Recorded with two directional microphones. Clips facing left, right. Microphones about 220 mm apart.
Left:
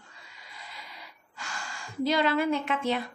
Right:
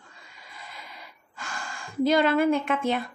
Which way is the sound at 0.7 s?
50° right (ahead or behind).